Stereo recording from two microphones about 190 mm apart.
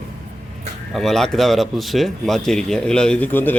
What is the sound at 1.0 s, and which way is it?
Speech, centre (ahead or behind).